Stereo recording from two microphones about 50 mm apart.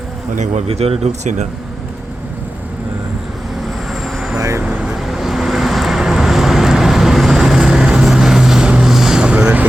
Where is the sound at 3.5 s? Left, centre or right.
Centre.